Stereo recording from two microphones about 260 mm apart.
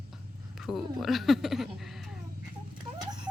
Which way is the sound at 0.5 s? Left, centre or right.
Centre.